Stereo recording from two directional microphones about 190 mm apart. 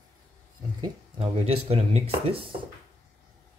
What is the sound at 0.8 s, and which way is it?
Speech, 30° right (ahead or behind).